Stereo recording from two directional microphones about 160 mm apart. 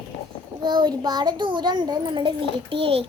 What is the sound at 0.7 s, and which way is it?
A child's voice, 30° right (ahead or behind).